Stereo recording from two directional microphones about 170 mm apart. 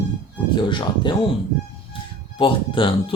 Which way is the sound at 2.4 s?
30° left (ahead or behind).